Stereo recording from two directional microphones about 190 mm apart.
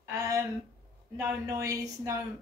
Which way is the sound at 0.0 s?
15° right (ahead or behind).